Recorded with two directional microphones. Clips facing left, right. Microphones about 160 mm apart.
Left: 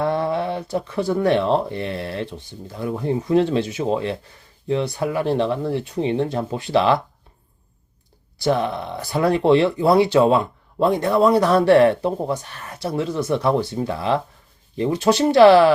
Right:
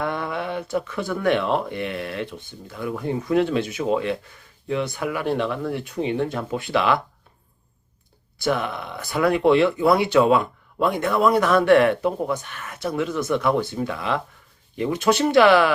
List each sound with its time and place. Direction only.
0.0 s speech: 30° left (ahead or behind)
8.4 s speech: 30° left (ahead or behind)